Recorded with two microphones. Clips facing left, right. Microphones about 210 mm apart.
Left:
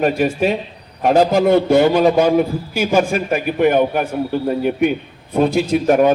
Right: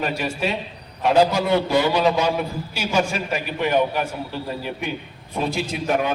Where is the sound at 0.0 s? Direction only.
50° left (ahead or behind).